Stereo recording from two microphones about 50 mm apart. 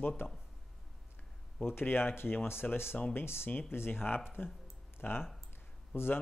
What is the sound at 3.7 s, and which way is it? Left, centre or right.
Speech, left.